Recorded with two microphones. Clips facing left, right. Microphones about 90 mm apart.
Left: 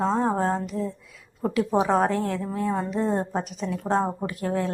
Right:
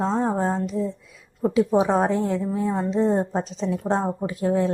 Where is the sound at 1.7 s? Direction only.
15° right (ahead or behind).